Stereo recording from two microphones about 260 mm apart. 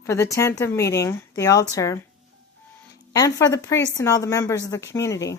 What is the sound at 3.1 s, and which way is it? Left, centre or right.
A woman's voice, centre.